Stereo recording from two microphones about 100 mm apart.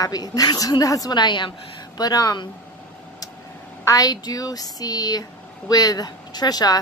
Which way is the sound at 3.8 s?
35° left (ahead or behind).